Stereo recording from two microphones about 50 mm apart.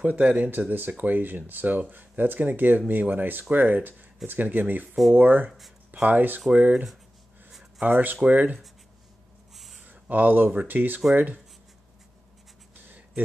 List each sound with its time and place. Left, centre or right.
0.0 s speech: right
7.8 s speech: right
9.8 s speech: right
12.7 s a sound: right